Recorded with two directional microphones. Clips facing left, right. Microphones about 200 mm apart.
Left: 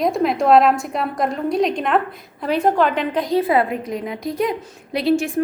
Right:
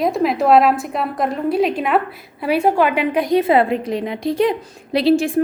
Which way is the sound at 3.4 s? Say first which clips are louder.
Right 3 dB; 25° right (ahead or behind).